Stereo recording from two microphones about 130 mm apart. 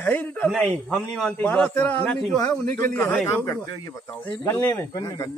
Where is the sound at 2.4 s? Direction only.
20° left (ahead or behind).